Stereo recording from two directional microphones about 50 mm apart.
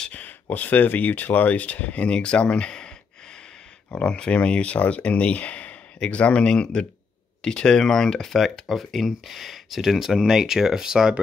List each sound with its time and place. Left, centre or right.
0.1 s speech: left; by 2.9 s centre
3.9 s speech: centre